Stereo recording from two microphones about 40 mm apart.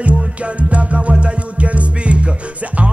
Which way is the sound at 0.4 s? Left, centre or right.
Right.